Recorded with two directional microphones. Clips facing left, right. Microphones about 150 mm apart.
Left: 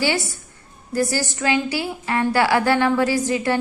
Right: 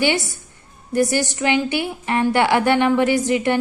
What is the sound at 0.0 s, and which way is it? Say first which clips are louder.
A woman's voice: right 2 dB; 20° right (ahead or behind).